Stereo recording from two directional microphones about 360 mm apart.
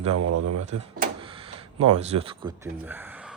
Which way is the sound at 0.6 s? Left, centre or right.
Centre.